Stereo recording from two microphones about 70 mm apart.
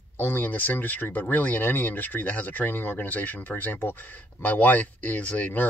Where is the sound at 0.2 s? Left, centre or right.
Left.